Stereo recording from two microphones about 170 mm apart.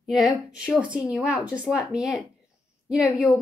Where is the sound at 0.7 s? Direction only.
5° right (ahead or behind).